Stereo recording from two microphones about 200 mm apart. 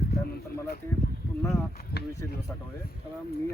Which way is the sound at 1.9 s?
50° left (ahead or behind).